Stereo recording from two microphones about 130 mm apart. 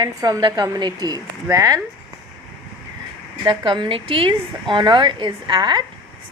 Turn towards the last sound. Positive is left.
turn(degrees=-35)  # may be behind; listen again after turning